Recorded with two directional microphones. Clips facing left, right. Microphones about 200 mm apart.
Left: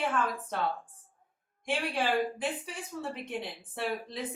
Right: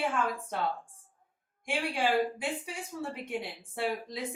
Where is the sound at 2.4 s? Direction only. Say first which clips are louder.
Left 1 dB; 10° right (ahead or behind).